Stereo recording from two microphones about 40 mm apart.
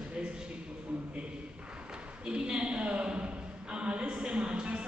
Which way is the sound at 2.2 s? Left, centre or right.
Right.